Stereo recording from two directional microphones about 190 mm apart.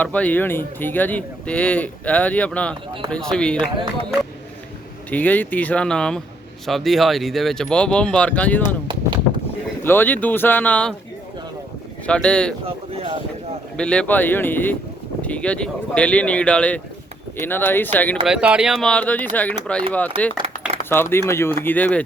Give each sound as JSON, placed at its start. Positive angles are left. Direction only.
{"t": 0.0, "sound": "speech", "side_deg": 10}
{"t": 5.1, "sound": "speech", "side_deg": 10}
{"t": 8.6, "sound": "a sound", "side_deg": -25}
{"t": 9.8, "sound": "speech", "side_deg": 10}
{"t": 12.0, "sound": "speech", "side_deg": 5}
{"t": 13.7, "sound": "speech", "side_deg": 5}
{"t": 18.3, "sound": "speech", "side_deg": -5}